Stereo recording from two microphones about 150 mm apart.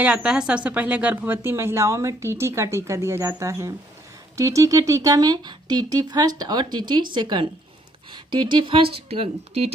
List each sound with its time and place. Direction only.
0.0 s speech: 10° right (ahead or behind); by 9.7 s 40° right (ahead or behind)